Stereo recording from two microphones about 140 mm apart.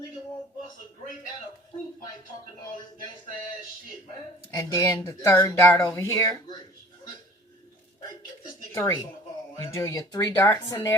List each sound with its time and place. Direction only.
4.5 s speech: 25° left (ahead or behind)
8.8 s speech: 25° left (ahead or behind)